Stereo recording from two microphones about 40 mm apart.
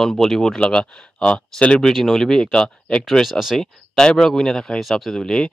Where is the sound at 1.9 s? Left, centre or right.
Centre.